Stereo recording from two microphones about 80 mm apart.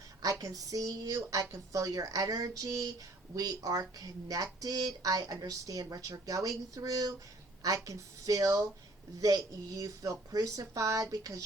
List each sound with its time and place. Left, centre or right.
0.2 s speech: right